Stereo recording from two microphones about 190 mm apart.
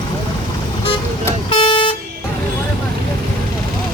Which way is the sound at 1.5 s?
25° left (ahead or behind).